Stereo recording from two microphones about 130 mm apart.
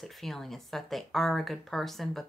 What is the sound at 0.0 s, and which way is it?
Speech, centre (ahead or behind).